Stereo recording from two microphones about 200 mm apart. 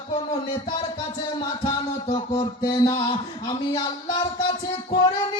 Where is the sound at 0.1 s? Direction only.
20° left (ahead or behind).